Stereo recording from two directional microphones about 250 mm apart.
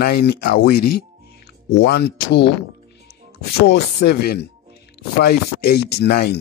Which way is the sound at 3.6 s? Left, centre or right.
Left.